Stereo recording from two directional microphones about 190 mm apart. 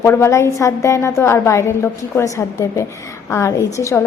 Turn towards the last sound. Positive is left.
turn(degrees=15)  # may be behind; listen again after turning